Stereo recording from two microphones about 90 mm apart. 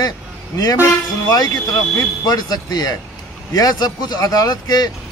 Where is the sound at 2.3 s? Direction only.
45° left (ahead or behind).